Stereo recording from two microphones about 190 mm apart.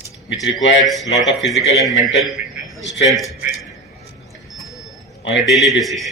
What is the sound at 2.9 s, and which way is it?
Speech, centre (ahead or behind).